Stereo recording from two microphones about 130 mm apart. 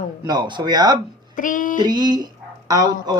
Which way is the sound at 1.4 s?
90° left.